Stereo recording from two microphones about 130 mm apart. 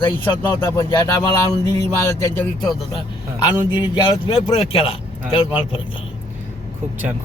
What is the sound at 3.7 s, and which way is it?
Speech, 35° left (ahead or behind).